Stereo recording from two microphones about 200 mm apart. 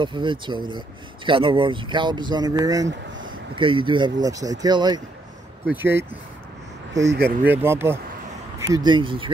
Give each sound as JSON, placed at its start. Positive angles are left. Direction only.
{"t": 0.0, "sound": "speech", "side_deg": -25}
{"t": 7.4, "sound": "speech", "side_deg": -10}